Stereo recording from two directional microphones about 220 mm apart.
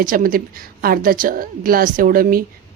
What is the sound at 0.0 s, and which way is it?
A woman's voice, 40° right (ahead or behind).